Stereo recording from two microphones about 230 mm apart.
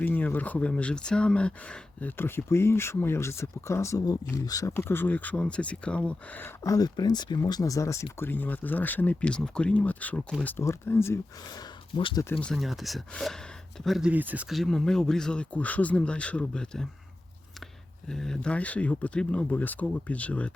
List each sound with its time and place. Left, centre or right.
0.0 s speech: centre
11.9 s speech: left
12.3 s speech: centre
18.1 s speech: centre